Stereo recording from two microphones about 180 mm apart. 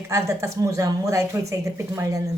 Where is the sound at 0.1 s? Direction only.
15° right (ahead or behind).